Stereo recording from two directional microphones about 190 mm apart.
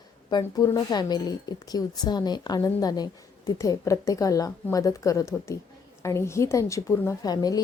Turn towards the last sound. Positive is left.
turn(degrees=20)  # may be behind; listen again after turning